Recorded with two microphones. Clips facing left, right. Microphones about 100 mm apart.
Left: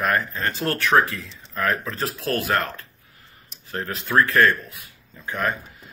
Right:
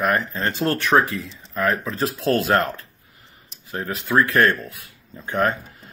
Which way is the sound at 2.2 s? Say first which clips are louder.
Right 5 dB; 30° right (ahead or behind).